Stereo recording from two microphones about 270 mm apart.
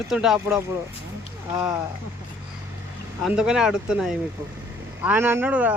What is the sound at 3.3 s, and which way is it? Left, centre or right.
Speech, centre.